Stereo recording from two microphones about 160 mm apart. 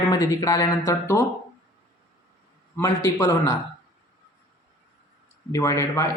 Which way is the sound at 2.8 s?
20° left (ahead or behind).